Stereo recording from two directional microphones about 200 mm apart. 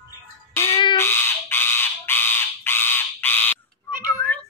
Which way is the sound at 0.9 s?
10° left (ahead or behind).